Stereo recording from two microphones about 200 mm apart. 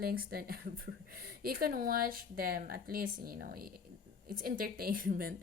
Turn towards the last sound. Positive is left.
turn(degrees=-45)  # may be behind; listen again after turning